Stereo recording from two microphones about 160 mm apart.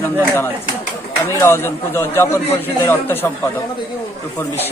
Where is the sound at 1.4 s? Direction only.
15° left (ahead or behind).